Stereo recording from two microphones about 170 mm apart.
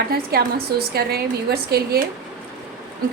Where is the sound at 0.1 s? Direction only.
65° right (ahead or behind).